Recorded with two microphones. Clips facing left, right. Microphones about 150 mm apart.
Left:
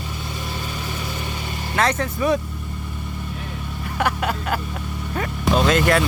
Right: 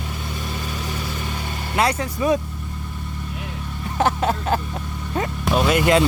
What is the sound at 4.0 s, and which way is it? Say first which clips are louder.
Speech: right 3 dB; 25° right (ahead or behind).